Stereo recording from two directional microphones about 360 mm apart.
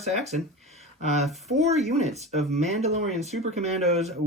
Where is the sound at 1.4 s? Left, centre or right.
Centre.